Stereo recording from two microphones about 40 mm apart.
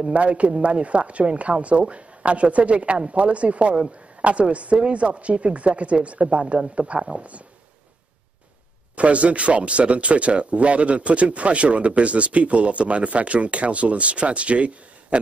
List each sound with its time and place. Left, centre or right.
0.0 s speech: right
8.9 s speech: right